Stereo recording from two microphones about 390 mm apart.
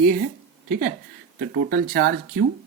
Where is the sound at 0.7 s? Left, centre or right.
Right.